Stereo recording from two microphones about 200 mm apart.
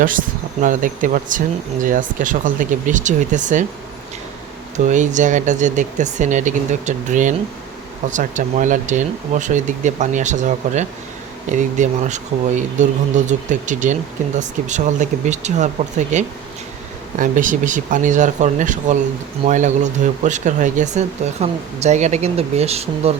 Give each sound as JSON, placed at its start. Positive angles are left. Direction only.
{"t": 0.0, "sound": "speech", "side_deg": -40}
{"t": 4.9, "sound": "speech", "side_deg": -40}